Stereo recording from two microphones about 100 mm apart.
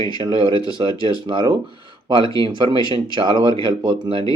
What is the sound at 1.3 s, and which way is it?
Speech, 50° right (ahead or behind).